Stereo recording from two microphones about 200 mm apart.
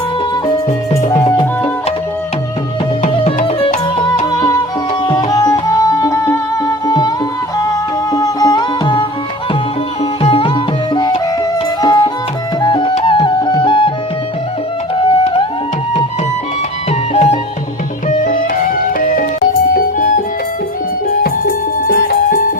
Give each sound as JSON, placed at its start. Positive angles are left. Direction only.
{"t": 1.1, "sound": "music", "side_deg": 20}
{"t": 3.0, "sound": "music", "side_deg": 35}
{"t": 4.3, "sound": "music", "side_deg": 20}
{"t": 8.1, "sound": "music", "side_deg": 20}
{"t": 10.0, "sound": "sitar", "side_deg": 30}
{"t": 11.8, "sound": "music", "side_deg": 20}
{"t": 14.9, "sound": "music", "side_deg": 25}
{"t": 17.2, "sound": "music", "side_deg": 30}
{"t": 21.2, "sound": "music", "side_deg": 45}